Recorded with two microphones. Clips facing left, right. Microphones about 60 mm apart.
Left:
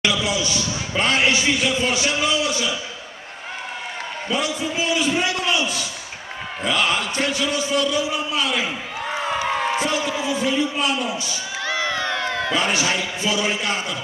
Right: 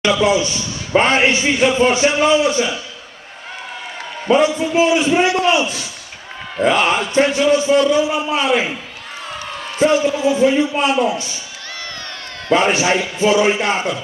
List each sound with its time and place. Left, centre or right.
0.0 s speech: right
4.3 s speech: right
9.6 s a sound: left
9.8 s speech: right
12.5 s speech: right